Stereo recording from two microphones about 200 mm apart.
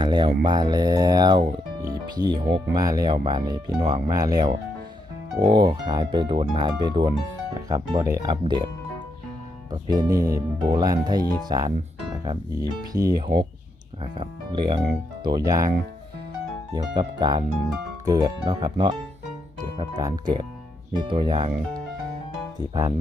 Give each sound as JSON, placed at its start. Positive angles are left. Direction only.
{"t": 0.0, "sound": "speech", "side_deg": -25}
{"t": 9.8, "sound": "speech", "side_deg": -20}
{"t": 12.9, "sound": "speech", "side_deg": -20}
{"t": 16.7, "sound": "speech", "side_deg": -20}